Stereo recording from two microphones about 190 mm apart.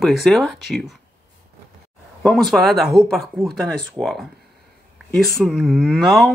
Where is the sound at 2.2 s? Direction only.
Centre (ahead or behind).